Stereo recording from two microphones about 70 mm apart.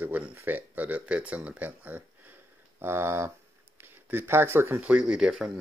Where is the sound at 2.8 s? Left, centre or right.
Right.